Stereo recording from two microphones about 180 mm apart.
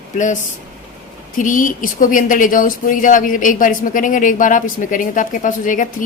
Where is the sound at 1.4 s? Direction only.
45° left (ahead or behind).